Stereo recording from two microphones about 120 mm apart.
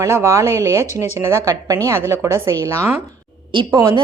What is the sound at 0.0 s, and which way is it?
A woman's voice, 25° right (ahead or behind).